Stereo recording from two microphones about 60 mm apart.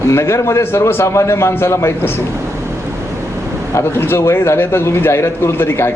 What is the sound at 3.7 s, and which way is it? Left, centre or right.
A man's voice, left.